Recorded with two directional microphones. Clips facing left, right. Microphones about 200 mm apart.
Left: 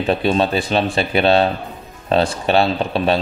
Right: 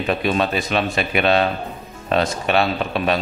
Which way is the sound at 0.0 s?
30° left (ahead or behind).